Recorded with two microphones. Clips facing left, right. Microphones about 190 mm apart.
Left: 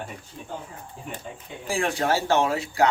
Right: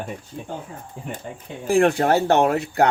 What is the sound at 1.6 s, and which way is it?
Speech, 55° right (ahead or behind).